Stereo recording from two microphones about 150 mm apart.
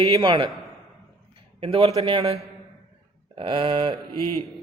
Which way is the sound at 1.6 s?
40° right (ahead or behind).